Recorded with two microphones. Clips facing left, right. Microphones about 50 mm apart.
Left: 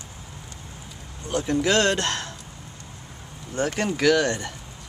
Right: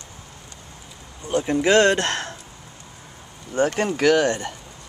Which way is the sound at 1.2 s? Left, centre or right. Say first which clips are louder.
Right 3 dB; centre.